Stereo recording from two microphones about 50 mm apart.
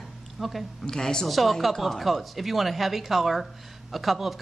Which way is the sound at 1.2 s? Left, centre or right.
Centre.